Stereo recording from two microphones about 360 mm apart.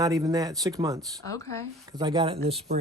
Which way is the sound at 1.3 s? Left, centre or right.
Centre.